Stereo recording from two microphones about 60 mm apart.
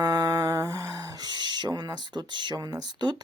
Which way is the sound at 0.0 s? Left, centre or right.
Right.